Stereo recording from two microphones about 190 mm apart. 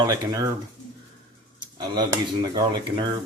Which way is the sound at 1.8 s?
25° right (ahead or behind).